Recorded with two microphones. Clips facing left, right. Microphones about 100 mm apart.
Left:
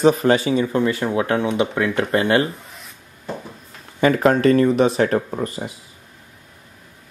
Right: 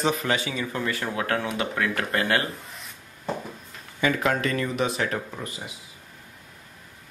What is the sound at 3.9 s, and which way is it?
Speech, 40° left (ahead or behind).